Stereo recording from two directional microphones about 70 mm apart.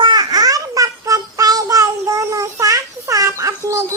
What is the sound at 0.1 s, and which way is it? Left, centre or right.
Child singing, right.